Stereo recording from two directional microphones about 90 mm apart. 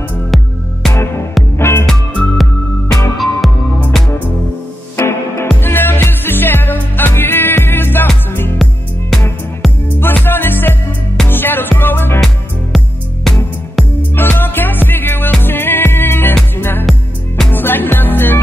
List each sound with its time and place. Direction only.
1.6 s music: 25° left (ahead or behind)
1.9 s music: 5° left (ahead or behind)
4.9 s music: 30° left (ahead or behind)
9.9 s music: 25° left (ahead or behind)
12.7 s music: centre (ahead or behind)
14.1 s music: 25° left (ahead or behind)